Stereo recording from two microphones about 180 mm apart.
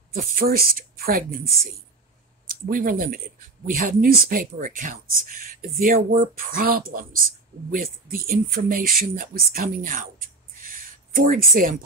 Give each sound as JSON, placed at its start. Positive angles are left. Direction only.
{"t": 0.1, "sound": "speech", "side_deg": -50}